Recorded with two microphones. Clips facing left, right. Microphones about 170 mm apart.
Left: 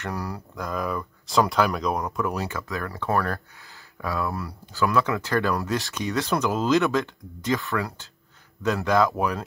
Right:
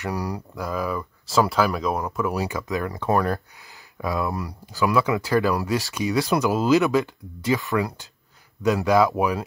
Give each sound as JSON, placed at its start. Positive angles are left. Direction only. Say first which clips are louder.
{"t": 0.1, "sound": "speech", "louder": "right 4 dB", "side_deg": -15}
{"t": 0.7, "sound": "speech", "louder": "right 2 dB", "side_deg": 0}
{"t": 2.4, "sound": "speech", "louder": "right 4 dB", "side_deg": -15}